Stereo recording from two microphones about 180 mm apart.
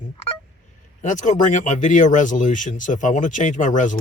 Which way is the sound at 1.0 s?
40° left (ahead or behind).